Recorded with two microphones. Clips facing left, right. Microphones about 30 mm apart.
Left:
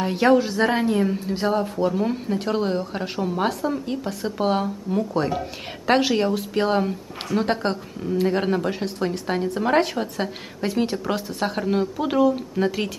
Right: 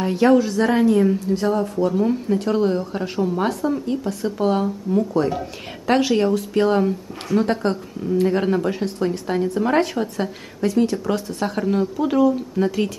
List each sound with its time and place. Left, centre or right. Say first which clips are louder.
0.0 s speech: right 2 dB; centre
1.1 s a woman's voice: right 3 dB; left
1.9 s a woman's voice: right 4 dB; centre